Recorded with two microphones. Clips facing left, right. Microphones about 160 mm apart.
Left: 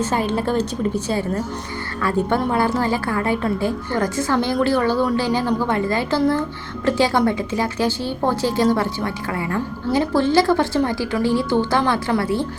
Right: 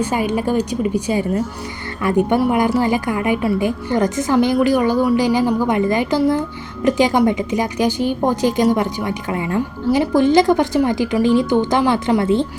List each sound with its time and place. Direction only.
0.0 s a woman's voice: 10° right (ahead or behind)